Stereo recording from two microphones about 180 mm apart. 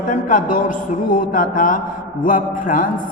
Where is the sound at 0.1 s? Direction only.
45° left (ahead or behind).